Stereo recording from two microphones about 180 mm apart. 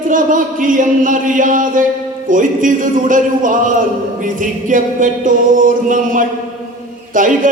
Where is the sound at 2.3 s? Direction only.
45° right (ahead or behind).